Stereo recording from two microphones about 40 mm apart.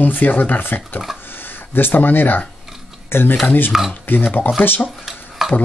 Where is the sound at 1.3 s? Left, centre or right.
Left.